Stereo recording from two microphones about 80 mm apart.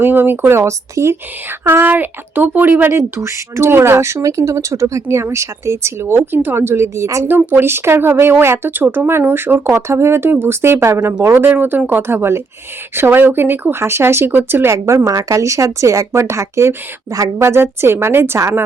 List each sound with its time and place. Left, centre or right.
0.0 s speech: right
3.2 s speech: right
7.3 s speech: right